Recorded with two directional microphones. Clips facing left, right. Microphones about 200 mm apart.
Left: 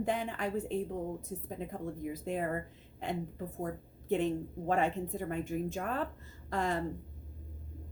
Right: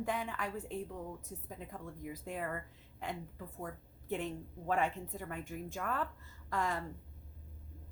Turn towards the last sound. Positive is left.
turn(degrees=25)  # may be behind; listen again after turning